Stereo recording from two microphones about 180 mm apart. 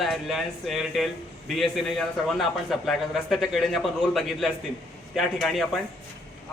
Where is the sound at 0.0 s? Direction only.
Centre (ahead or behind).